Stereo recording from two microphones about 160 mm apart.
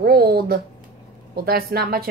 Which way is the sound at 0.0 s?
75° right (ahead or behind).